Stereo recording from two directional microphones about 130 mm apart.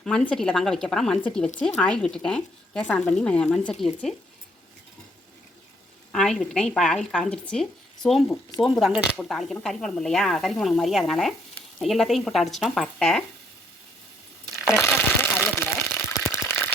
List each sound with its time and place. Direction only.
0.0 s a woman's voice: 5° left (ahead or behind)
6.1 s a woman's voice: 5° left (ahead or behind)
14.8 s a sound: 15° left (ahead or behind)